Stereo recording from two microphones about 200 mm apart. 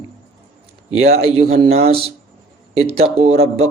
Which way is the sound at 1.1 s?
30° right (ahead or behind).